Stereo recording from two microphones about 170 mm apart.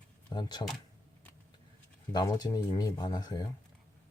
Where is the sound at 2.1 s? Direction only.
25° left (ahead or behind).